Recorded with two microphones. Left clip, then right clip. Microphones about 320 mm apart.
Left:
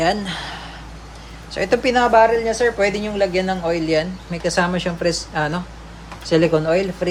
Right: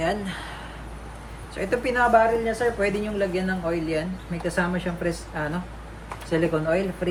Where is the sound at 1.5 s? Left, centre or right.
Centre.